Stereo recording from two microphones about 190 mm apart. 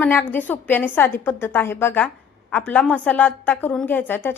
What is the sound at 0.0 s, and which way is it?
A woman's voice, 10° left (ahead or behind).